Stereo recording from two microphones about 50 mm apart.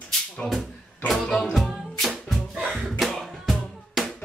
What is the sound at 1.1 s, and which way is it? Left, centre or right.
Music, centre.